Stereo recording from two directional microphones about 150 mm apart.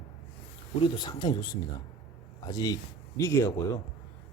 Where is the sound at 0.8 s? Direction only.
30° left (ahead or behind).